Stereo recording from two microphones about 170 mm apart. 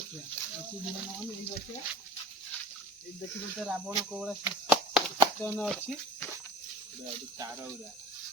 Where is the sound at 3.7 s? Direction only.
5° right (ahead or behind).